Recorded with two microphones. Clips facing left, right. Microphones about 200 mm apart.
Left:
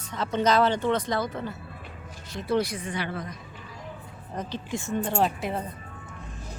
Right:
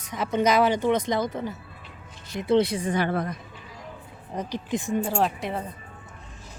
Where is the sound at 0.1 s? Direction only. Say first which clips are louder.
Right 1 dB; 15° right (ahead or behind).